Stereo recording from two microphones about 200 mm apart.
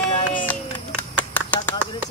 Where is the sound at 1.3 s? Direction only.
10° left (ahead or behind).